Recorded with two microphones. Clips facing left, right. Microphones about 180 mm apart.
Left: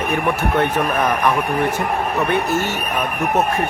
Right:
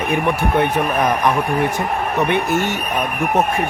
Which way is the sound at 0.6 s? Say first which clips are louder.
Right 1 dB; 15° right (ahead or behind).